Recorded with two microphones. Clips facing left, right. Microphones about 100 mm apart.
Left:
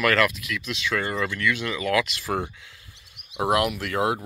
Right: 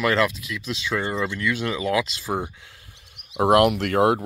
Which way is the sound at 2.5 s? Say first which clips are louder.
Even; 40° right (ahead or behind).